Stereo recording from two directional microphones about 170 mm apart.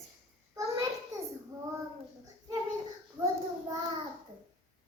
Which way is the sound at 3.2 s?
20° right (ahead or behind).